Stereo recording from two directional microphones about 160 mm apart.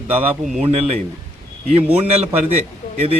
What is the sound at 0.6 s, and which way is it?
Speech, 40° right (ahead or behind).